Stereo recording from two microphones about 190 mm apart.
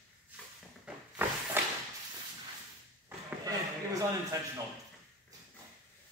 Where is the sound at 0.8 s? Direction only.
10° right (ahead or behind).